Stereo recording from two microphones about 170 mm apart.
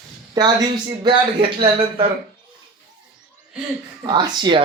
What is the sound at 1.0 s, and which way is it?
Speech, 30° right (ahead or behind).